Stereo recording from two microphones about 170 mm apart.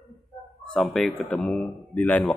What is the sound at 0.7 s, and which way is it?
Speech, centre (ahead or behind).